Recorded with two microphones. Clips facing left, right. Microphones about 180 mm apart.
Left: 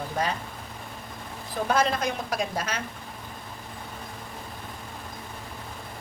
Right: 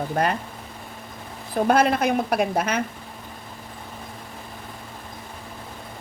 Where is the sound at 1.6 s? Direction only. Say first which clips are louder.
Right 6 dB; 55° right (ahead or behind).